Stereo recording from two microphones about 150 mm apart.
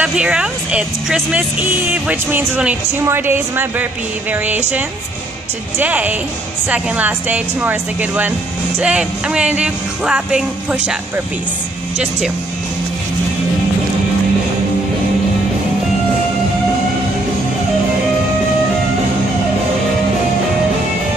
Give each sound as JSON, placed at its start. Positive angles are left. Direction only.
{"t": 0.0, "sound": "a woman's voice", "side_deg": -5}
{"t": 5.8, "sound": "a woman's voice", "side_deg": -10}